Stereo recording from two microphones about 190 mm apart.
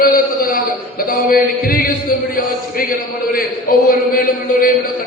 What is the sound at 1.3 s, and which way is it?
Speech, 50° left (ahead or behind).